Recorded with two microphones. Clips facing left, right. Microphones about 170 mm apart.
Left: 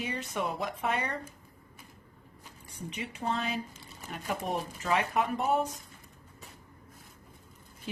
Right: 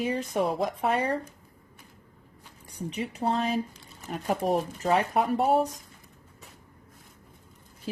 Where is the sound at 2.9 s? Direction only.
40° right (ahead or behind).